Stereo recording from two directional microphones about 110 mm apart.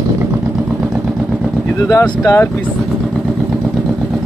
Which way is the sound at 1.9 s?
30° left (ahead or behind).